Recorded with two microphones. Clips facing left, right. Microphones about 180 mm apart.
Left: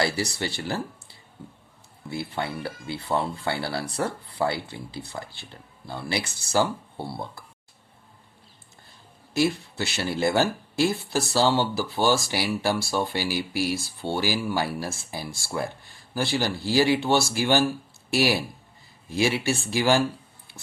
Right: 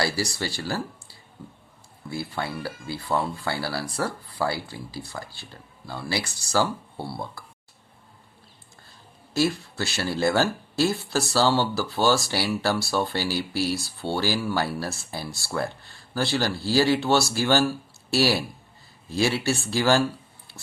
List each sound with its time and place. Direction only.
0.0 s speech: 20° left (ahead or behind)
9.6 s speech: 20° left (ahead or behind)